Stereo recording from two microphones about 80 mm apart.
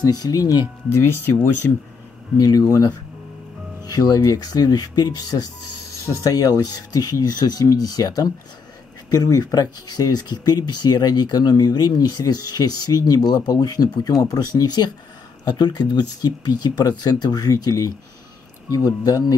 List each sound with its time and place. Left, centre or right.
0.0 s speech: left
0.9 s speech: left
2.4 s speech: left